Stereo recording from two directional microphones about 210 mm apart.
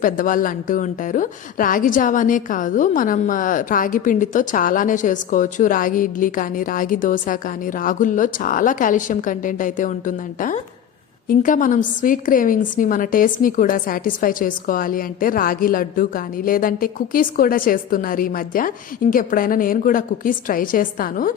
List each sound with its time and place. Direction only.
0.0 s a woman's voice: 40° left (ahead or behind)